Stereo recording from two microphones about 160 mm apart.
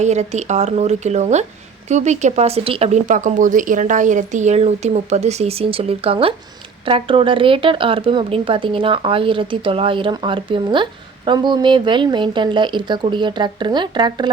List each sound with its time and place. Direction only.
0.0 s speech: 45° right (ahead or behind); by 14.3 s 30° right (ahead or behind)